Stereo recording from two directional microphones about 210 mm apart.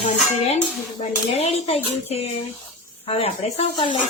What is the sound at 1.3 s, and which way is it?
A woman's voice, 30° left (ahead or behind).